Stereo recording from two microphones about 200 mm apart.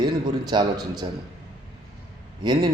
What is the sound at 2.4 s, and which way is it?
Speech, 20° right (ahead or behind).